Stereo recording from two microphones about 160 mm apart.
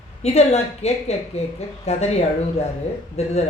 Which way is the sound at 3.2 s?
40° left (ahead or behind).